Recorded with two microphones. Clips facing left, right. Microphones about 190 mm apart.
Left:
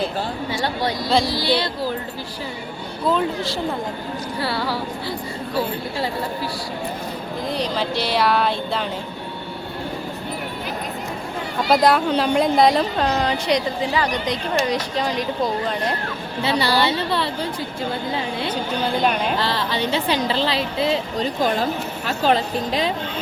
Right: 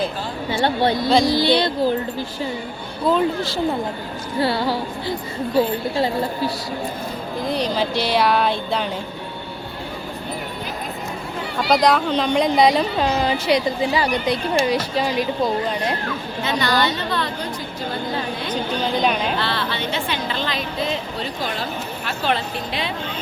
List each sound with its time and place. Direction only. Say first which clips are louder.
0.5 s speech: right 6 dB; 25° right (ahead or behind)
1.1 s a woman's voice: right 2 dB; 5° left (ahead or behind)
1.4 s speech: right 4 dB; 20° right (ahead or behind)
3.1 s a woman's voice: right 2 dB; centre (ahead or behind)
4.4 s speech: right 5 dB; 20° right (ahead or behind)
7.5 s a woman's voice: right 2 dB; centre (ahead or behind)
11.7 s a woman's voice: left 1 dB; 5° left (ahead or behind)
16.4 s a woman's voice: left 1 dB; 30° left (ahead or behind)
18.8 s a woman's voice: even; 5° left (ahead or behind)
19.5 s a woman's voice: left 2 dB; 35° left (ahead or behind)
21.2 s a woman's voice: left 6 dB; 40° left (ahead or behind)